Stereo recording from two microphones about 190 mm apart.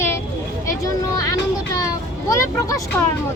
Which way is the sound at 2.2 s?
15° left (ahead or behind).